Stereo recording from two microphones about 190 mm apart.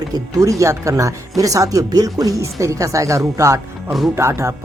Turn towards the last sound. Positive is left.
turn(degrees=-15)  # may be behind; listen again after turning